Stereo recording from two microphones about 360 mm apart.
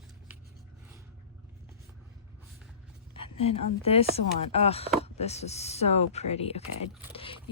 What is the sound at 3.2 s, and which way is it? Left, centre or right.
A woman's voice, centre.